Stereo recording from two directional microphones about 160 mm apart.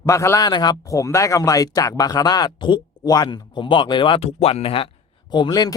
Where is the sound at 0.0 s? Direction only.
20° left (ahead or behind).